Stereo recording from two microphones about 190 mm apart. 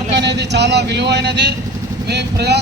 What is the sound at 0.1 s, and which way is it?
Speech, 65° right (ahead or behind).